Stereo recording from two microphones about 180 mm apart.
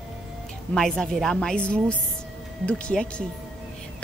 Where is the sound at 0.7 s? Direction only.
5° left (ahead or behind).